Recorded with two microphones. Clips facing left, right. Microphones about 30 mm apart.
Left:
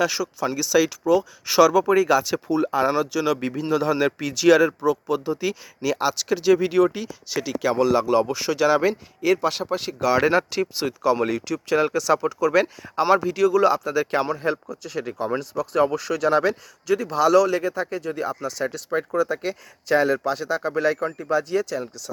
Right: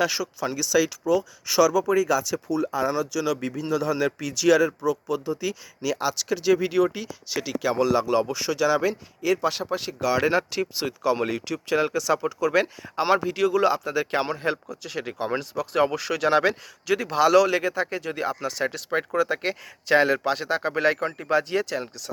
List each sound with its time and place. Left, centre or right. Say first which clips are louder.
0.0 s speech: left 2 dB; centre
11.8 s speech: left 3 dB; centre
12.4 s speech: left 3 dB; centre
14.4 s speech: left 2 dB; right
16.8 s a man's voice: left 1 dB; right